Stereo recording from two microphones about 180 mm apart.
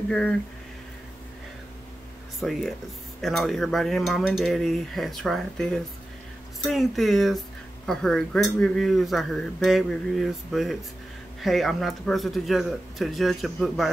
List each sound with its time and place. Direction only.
0.1 s speech: 5° left (ahead or behind)
2.4 s speech: centre (ahead or behind)